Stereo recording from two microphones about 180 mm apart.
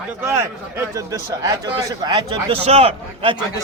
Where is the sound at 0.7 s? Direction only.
20° right (ahead or behind).